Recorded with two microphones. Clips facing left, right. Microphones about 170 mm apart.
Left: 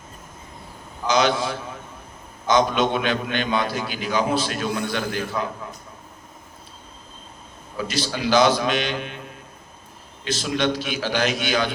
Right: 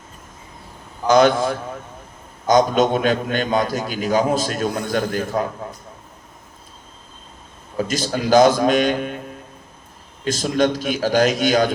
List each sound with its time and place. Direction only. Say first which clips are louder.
1.0 s a man's voice: right 6 dB; 50° right (ahead or behind)
7.8 s a man's voice: right 4 dB; 45° right (ahead or behind)
10.2 s a man's voice: right 5 dB; 45° right (ahead or behind)